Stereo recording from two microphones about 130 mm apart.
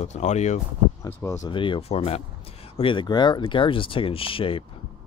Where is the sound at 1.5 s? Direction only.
40° left (ahead or behind).